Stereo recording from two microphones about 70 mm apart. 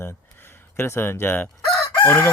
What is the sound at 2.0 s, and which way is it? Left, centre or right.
Chicken, left.